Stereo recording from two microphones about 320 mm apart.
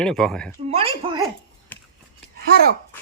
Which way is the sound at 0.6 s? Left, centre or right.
Centre.